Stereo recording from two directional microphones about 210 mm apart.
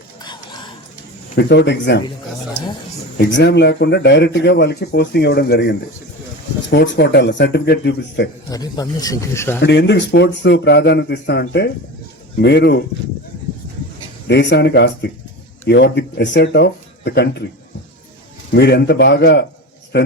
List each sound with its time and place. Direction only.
0.2 s whispering: 20° left (ahead or behind)
1.4 s speech: 55° left (ahead or behind)
3.2 s speech: 55° left (ahead or behind)
8.4 s speech: 20° left (ahead or behind)
9.6 s speech: 55° left (ahead or behind)
14.3 s speech: 55° left (ahead or behind)
18.5 s speech: 55° left (ahead or behind)